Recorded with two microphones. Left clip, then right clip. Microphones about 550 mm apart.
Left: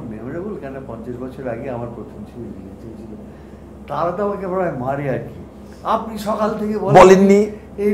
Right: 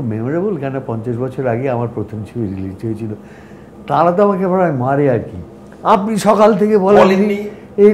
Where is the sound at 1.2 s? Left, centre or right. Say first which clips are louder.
Right 9 dB; right.